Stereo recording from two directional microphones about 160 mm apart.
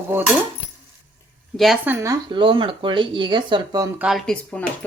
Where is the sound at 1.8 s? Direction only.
15° right (ahead or behind).